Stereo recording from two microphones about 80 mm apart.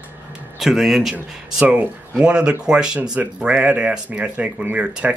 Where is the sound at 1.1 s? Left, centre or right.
Centre.